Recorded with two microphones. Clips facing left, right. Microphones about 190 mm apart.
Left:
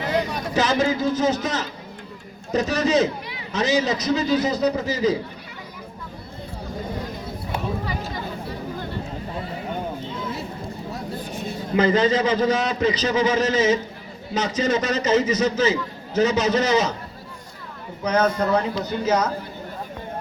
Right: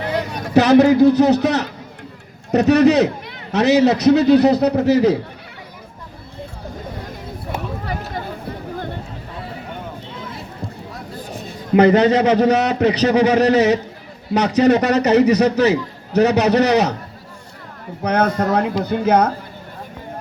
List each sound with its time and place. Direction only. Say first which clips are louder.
0.5 s a man's voice: right 10 dB; 70° right (ahead or behind)
7.9 s a sound: right 3 dB; 55° right (ahead or behind)
11.7 s a man's voice: right 6 dB; 65° right (ahead or behind)
18.0 s a man's voice: right 3 dB; 60° right (ahead or behind)